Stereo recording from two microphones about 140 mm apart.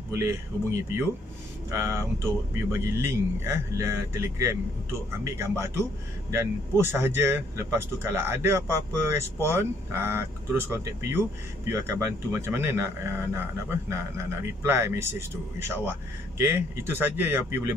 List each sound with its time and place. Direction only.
0.1 s a man's voice: 20° right (ahead or behind)
1.7 s a man's voice: 20° right (ahead or behind)